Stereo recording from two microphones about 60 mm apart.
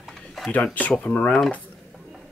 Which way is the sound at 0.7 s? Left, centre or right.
Left.